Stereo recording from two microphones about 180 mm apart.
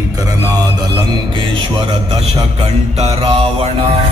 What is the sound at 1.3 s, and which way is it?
Music, 30° right (ahead or behind).